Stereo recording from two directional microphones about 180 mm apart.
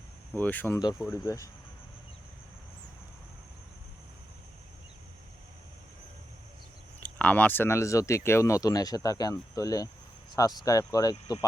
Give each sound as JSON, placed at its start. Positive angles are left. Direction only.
{"t": 0.3, "sound": "speech", "side_deg": 10}
{"t": 7.0, "sound": "speech", "side_deg": 10}